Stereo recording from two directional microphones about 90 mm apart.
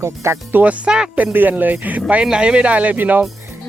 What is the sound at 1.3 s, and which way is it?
Speech, 20° right (ahead or behind).